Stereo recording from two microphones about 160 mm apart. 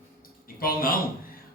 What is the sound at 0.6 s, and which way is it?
Speech, 65° left (ahead or behind).